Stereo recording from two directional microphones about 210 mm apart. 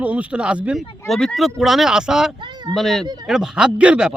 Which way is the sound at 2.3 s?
20° right (ahead or behind).